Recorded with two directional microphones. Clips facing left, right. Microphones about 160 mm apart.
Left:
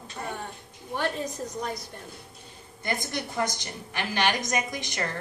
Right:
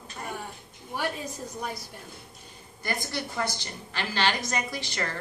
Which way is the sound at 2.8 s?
20° left (ahead or behind).